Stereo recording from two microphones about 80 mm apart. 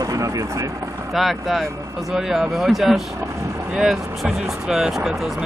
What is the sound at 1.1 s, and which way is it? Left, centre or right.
Speech, centre.